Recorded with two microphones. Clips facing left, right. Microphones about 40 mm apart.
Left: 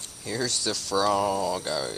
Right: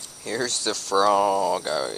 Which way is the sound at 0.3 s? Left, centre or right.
Centre.